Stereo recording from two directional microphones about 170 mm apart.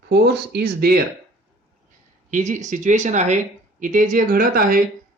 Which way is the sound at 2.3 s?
45° right (ahead or behind).